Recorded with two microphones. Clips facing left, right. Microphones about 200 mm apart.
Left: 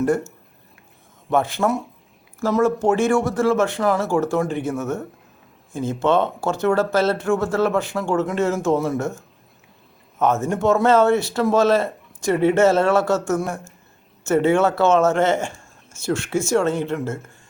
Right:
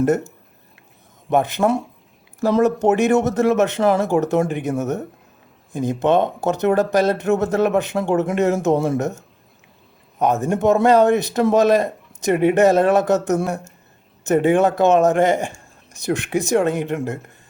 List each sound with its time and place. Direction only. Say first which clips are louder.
1.3 s speech: right 2 dB; 20° right (ahead or behind)
10.2 s speech: right 1 dB; 15° right (ahead or behind)